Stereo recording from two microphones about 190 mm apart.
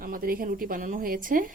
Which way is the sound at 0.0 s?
50° right (ahead or behind).